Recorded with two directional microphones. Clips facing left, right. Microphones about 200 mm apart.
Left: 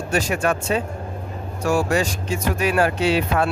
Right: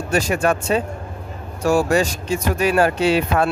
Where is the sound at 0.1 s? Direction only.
35° right (ahead or behind).